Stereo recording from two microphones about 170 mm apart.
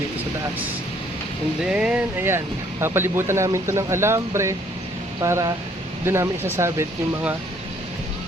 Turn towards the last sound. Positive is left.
turn(degrees=-15)  # may be behind; listen again after turning